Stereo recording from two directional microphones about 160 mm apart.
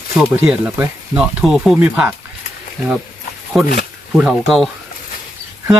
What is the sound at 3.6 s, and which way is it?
Speech, 85° left.